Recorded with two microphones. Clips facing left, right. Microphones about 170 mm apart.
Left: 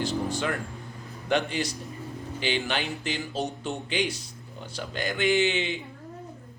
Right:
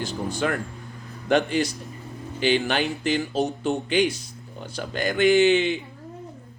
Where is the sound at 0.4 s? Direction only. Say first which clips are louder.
Right 4 dB; 55° right (ahead or behind).